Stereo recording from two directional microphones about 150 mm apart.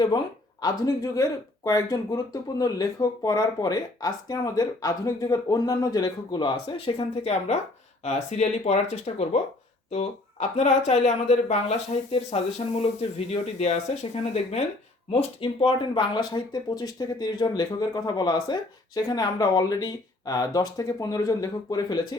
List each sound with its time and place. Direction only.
0.6 s speech: 25° left (ahead or behind); by 9.4 s 50° left (ahead or behind)
10.6 s speech: 50° left (ahead or behind); by 22.0 s 25° left (ahead or behind)